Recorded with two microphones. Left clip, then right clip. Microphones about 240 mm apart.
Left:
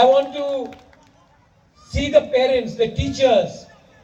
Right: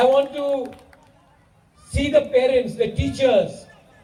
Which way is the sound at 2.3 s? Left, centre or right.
Left.